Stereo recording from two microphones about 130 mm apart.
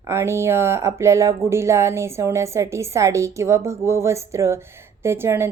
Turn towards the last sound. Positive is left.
turn(degrees=-20)  # may be behind; listen again after turning